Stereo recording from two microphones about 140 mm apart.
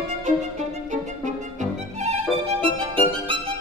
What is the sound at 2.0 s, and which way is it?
Music, 45° right (ahead or behind).